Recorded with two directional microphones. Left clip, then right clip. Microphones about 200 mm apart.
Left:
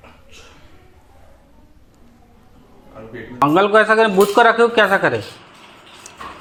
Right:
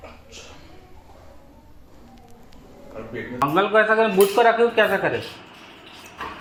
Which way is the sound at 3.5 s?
60° left (ahead or behind).